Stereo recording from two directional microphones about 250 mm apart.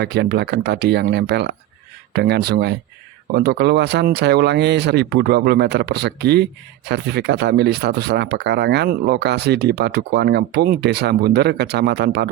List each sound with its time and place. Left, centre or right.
0.0 s speech: right